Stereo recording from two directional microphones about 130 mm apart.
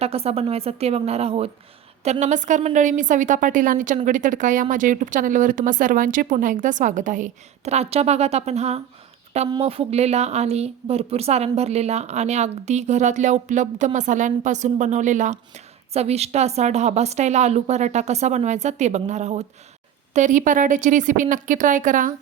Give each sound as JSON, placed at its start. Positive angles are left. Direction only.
{"t": 0.0, "sound": "a woman's voice", "side_deg": -50}
{"t": 2.0, "sound": "a woman's voice", "side_deg": -65}
{"t": 20.1, "sound": "a woman's voice", "side_deg": -75}